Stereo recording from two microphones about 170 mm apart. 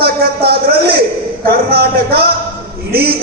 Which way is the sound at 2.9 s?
65° right (ahead or behind).